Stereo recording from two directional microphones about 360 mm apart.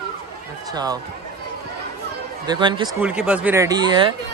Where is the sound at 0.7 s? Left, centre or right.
Centre.